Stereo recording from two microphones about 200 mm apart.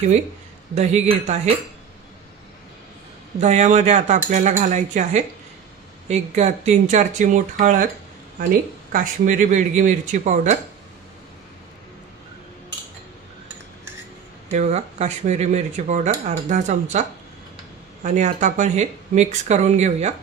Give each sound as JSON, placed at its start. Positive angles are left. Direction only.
{"t": 0.7, "sound": "speech", "side_deg": -35}
{"t": 3.3, "sound": "speech", "side_deg": -35}
{"t": 8.9, "sound": "speech", "side_deg": -40}
{"t": 14.5, "sound": "speech", "side_deg": -35}
{"t": 18.0, "sound": "speech", "side_deg": -40}